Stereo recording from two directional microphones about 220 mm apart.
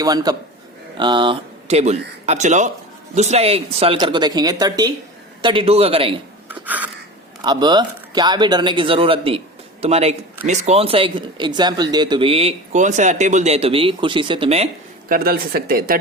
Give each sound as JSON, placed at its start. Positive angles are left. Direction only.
{"t": 0.0, "sound": "a man's voice", "side_deg": -20}
{"t": 6.5, "sound": "a sound", "side_deg": -5}
{"t": 7.4, "sound": "speech", "side_deg": -20}
{"t": 15.1, "sound": "speech", "side_deg": -40}